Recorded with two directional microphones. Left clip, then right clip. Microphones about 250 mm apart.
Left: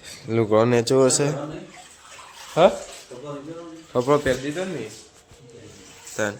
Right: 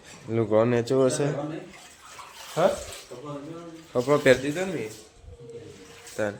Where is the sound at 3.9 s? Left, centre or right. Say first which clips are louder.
Left 3 dB; centre.